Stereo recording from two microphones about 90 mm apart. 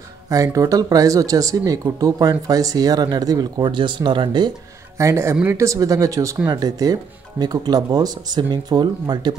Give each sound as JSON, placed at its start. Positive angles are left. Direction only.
{"t": 0.3, "sound": "speech", "side_deg": -40}
{"t": 3.6, "sound": "speech", "side_deg": -65}
{"t": 4.9, "sound": "speech", "side_deg": -35}